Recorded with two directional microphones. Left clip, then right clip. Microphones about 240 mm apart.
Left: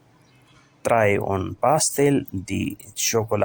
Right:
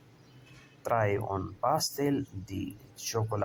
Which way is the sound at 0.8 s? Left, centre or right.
Left.